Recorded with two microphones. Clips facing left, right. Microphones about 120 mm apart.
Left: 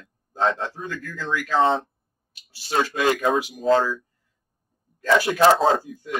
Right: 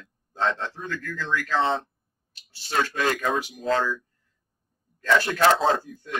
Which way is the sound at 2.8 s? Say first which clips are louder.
Left 3 dB; 15° left (ahead or behind).